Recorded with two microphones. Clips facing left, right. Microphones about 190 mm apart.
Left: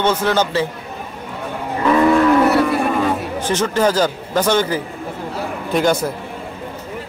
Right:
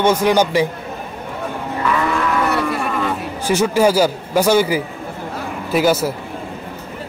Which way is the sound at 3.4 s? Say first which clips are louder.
Right 3 dB; 10° right (ahead or behind).